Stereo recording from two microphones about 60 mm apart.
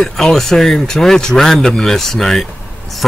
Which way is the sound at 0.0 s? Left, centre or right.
Centre.